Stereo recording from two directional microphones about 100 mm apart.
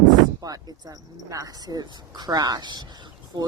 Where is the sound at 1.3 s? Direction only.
40° right (ahead or behind).